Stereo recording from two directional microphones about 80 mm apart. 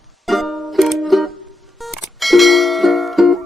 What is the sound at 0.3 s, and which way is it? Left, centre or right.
Music, centre.